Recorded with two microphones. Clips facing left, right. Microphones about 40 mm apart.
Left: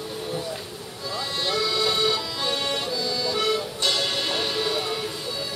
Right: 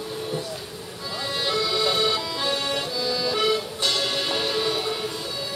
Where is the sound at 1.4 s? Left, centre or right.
Centre.